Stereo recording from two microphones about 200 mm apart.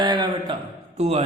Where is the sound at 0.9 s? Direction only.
30° right (ahead or behind).